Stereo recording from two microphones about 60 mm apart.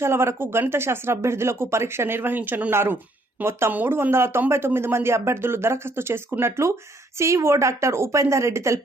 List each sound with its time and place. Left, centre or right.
0.0 s speech: right
3.9 s speech: right